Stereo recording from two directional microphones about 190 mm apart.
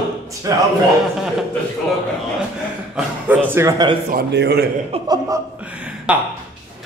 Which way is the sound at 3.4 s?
15° right (ahead or behind).